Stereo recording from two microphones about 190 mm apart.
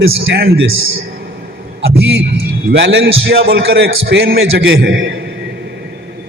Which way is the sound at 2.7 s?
60° right (ahead or behind).